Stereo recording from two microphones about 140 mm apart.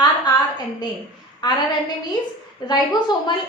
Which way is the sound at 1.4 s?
35° left (ahead or behind).